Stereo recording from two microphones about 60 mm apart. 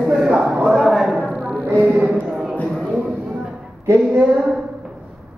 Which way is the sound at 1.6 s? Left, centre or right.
Right.